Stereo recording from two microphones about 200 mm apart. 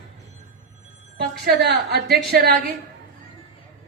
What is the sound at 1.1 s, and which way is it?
Speech, 55° right (ahead or behind).